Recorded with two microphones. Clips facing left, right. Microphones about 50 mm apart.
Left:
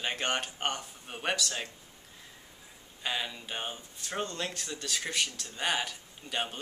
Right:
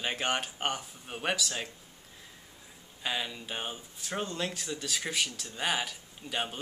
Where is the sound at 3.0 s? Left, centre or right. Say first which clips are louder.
Even; centre.